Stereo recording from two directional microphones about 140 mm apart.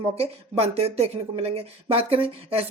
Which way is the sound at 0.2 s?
45° right (ahead or behind).